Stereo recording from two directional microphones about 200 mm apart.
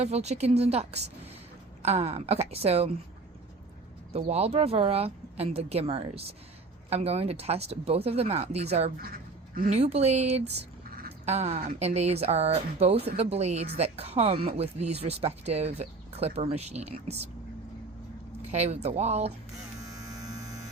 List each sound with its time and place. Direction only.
0.0 s a woman's voice: 35° right (ahead or behind)
4.1 s a woman's voice: 30° right (ahead or behind)
10.8 s a sound: 50° right (ahead or behind)
11.3 s a woman's voice: 35° right (ahead or behind)
18.4 s a woman's voice: 35° right (ahead or behind)